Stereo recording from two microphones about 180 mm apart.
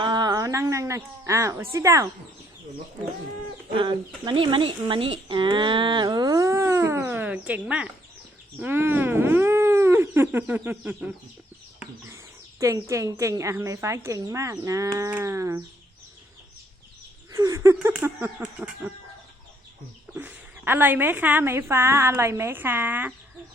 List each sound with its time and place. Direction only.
0.0 s speech: 25° right (ahead or behind)
3.8 s speech: 25° right (ahead or behind); by 7.9 s 5° right (ahead or behind)
8.6 s wild animals: 10° right (ahead or behind)
11.8 s speech: 15° right (ahead or behind)
17.3 s speech: 20° right (ahead or behind)
20.1 s speech: 10° right (ahead or behind)